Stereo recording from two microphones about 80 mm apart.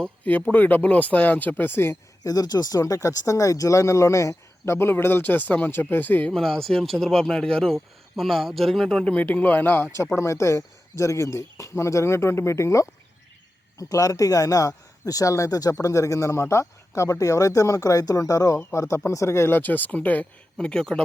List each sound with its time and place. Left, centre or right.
0.5 s speech: left
2.2 s speech: left
6.3 s speech: centre
9.1 s speech: left